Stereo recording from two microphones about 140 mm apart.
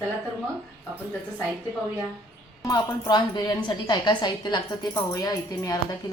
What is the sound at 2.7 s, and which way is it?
A woman's voice, 30° left (ahead or behind).